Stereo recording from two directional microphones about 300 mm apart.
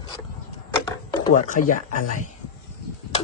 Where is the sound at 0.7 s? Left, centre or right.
Left.